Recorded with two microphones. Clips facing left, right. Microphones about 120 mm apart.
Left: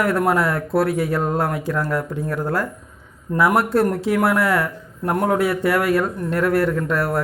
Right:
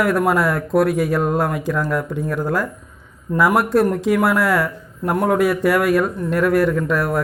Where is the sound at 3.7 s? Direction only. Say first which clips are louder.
Right 2 dB; 30° left (ahead or behind).